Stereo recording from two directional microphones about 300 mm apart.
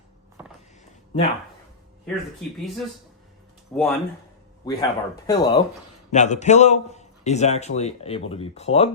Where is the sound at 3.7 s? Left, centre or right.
Centre.